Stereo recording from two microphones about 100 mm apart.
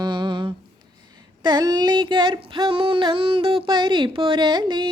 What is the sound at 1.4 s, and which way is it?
Female singing, 45° right (ahead or behind).